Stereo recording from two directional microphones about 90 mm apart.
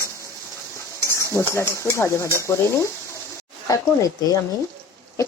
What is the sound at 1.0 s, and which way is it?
Speech, 30° left (ahead or behind).